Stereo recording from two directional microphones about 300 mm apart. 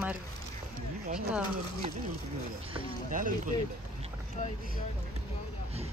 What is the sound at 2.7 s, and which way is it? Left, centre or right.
Speech, right.